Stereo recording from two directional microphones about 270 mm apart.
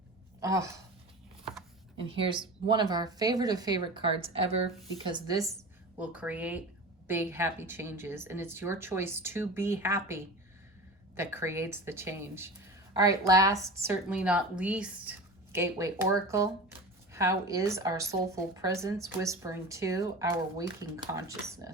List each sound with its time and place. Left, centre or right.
0.3 s speech: centre
2.0 s speech: centre